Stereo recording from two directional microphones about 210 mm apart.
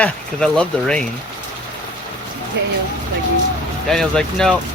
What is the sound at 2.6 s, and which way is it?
Speech, 55° right (ahead or behind).